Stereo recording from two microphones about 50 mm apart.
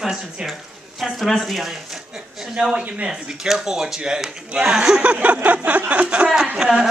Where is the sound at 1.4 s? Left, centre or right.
Centre.